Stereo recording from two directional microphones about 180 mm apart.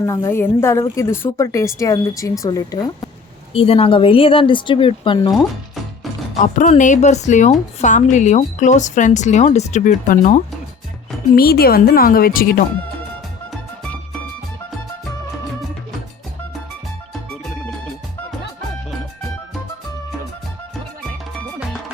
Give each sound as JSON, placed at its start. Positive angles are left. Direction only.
{"t": 0.0, "sound": "a woman's voice", "side_deg": 15}
{"t": 3.5, "sound": "speech", "side_deg": 30}
{"t": 6.4, "sound": "speech", "side_deg": 45}
{"t": 11.3, "sound": "a woman's voice", "side_deg": 55}